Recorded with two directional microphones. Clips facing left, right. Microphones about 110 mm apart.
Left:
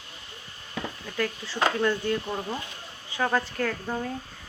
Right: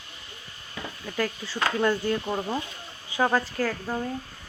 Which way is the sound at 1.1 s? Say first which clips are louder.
Right 1 dB; 5° right (ahead or behind).